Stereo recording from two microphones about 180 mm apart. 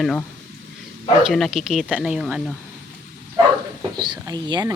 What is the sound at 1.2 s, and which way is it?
Speech, centre (ahead or behind).